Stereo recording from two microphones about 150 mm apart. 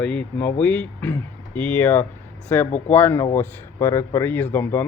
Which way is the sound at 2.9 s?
15° left (ahead or behind).